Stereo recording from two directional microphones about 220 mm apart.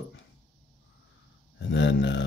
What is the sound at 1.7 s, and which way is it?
Speech, 55° left (ahead or behind).